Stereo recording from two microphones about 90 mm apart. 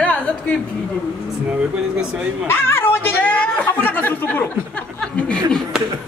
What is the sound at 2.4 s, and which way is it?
A woman's voice, 25° left (ahead or behind).